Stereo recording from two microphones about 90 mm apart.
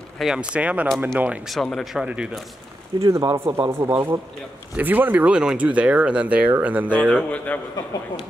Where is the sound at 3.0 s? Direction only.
35° right (ahead or behind).